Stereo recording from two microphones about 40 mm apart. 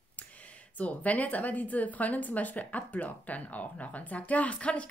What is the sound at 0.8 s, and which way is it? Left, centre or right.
A woman's voice, left.